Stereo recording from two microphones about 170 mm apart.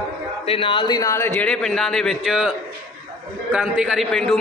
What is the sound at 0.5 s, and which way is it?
A man's voice, 30° left (ahead or behind).